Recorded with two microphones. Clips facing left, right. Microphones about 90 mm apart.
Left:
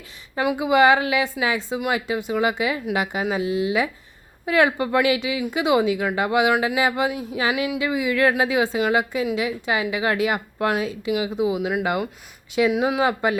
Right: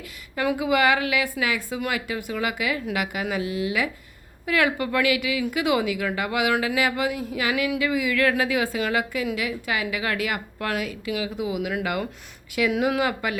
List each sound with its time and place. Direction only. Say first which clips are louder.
0.3 s a woman's voice: left 4 dB; 20° left (ahead or behind)